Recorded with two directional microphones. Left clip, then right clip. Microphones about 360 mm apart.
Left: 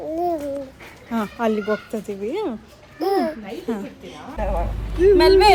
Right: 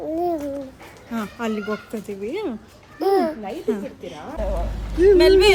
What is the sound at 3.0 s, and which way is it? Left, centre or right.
Speech, centre.